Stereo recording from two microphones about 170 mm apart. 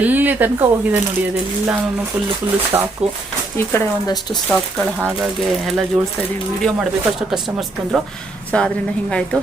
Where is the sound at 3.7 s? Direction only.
20° left (ahead or behind).